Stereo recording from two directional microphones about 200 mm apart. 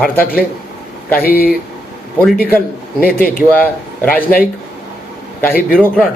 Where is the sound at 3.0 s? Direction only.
45° left (ahead or behind).